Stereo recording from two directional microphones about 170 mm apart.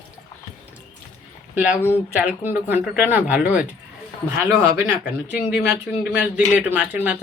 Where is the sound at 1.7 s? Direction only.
15° left (ahead or behind).